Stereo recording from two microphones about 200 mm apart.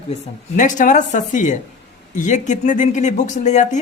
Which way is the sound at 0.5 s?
40° left (ahead or behind).